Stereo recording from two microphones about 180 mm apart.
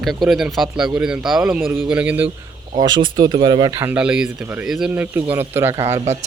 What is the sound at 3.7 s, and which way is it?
Speech, 10° right (ahead or behind).